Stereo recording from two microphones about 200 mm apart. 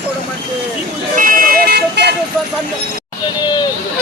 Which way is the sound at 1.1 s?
45° right (ahead or behind).